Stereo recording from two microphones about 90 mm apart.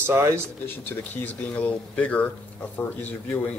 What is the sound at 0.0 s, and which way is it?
Speech, 25° right (ahead or behind).